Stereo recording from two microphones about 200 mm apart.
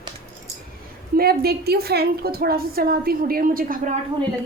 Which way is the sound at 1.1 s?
50° right (ahead or behind).